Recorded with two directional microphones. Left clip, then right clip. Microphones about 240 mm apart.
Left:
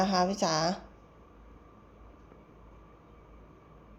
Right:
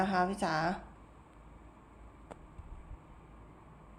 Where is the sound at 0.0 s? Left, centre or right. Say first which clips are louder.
Left 4 dB; centre.